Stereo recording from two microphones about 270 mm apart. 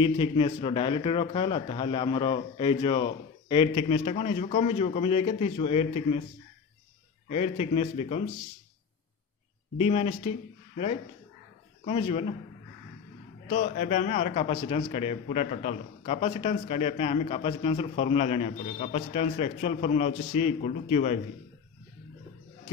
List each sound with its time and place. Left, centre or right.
0.0 s a man's voice: centre
7.2 s a man's voice: left
9.8 s a man's voice: left
11.8 s a man's voice: left
13.5 s a man's voice: left